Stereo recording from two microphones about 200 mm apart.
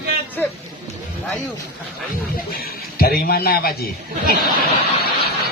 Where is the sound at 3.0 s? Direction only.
50° left (ahead or behind).